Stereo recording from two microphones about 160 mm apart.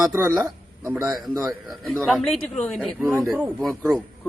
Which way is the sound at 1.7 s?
Centre (ahead or behind).